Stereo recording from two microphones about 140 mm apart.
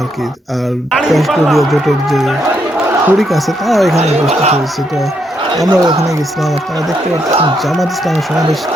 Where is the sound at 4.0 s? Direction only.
50° right (ahead or behind).